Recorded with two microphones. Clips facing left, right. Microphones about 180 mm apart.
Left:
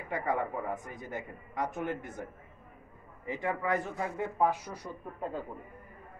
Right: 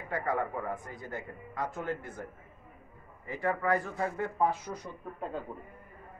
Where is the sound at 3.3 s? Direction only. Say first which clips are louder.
Right 2 dB; 20° left (ahead or behind).